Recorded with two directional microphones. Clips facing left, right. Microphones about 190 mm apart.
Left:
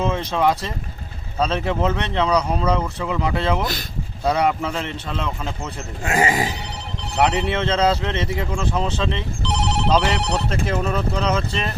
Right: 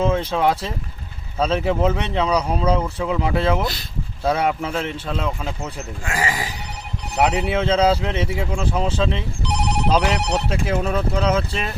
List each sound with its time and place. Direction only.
0.1 s speech: 5° right (ahead or behind)
6.1 s speech: 25° left (ahead or behind)
7.2 s speech: 5° right (ahead or behind)